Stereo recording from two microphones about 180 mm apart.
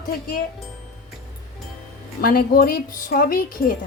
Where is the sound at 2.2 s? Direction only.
55° left (ahead or behind).